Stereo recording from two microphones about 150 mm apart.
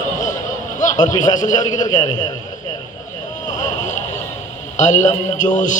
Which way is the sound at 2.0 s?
30° left (ahead or behind).